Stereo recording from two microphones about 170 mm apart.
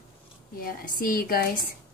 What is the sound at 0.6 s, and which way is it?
Speech, 60° left (ahead or behind).